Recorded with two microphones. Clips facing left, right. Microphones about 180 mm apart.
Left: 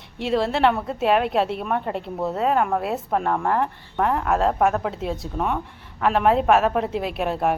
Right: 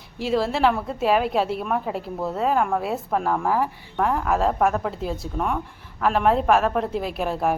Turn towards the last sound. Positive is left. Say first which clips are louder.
# left 1 dB
turn(degrees=0)  # may be behind; listen again after turning